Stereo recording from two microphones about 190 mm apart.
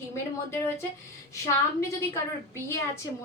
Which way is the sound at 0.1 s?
15° left (ahead or behind).